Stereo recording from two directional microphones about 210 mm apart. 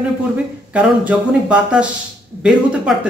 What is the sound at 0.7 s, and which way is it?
Speech, 5° right (ahead or behind).